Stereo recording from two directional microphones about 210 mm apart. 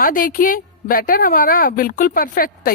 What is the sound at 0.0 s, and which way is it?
A woman's voice, 40° left (ahead or behind).